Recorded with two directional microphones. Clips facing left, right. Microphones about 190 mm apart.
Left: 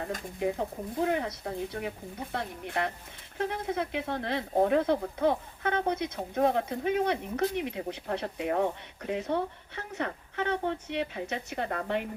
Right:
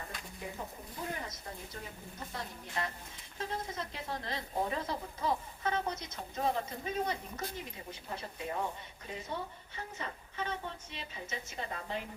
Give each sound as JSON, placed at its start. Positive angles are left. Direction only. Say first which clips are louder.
{"t": 0.3, "sound": "speech", "louder": "left 13 dB", "side_deg": 70}